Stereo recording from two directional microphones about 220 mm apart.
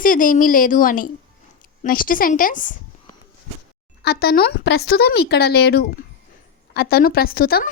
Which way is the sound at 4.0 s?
45° left (ahead or behind).